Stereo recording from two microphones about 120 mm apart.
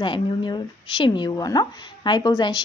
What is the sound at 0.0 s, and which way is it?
Speech, 45° left (ahead or behind).